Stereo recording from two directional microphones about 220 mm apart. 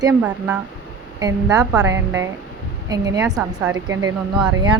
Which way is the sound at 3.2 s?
Centre (ahead or behind).